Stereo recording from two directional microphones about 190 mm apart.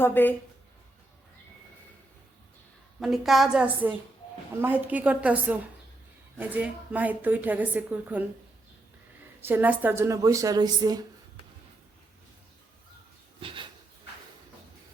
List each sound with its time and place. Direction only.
0.0 s speech: 10° left (ahead or behind)
3.0 s a woman's voice: centre (ahead or behind)
9.4 s a woman's voice: 10° right (ahead or behind)
13.4 s speech: 30° right (ahead or behind)